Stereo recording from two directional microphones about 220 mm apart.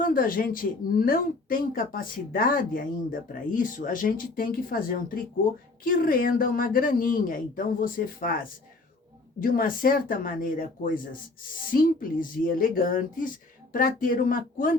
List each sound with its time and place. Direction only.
0.0 s speech: 40° left (ahead or behind)
9.4 s speech: 40° left (ahead or behind)
12.5 s speech: 40° left (ahead or behind)